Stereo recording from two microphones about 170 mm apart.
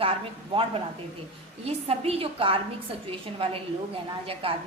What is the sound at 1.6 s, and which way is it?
A woman's voice, 35° right (ahead or behind).